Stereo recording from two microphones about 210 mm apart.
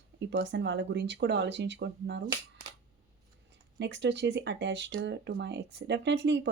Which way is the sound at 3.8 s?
55° right (ahead or behind).